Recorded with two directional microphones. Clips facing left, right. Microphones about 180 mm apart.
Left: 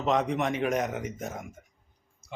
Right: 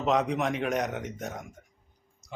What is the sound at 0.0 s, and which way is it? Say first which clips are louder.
Speech: even; centre (ahead or behind).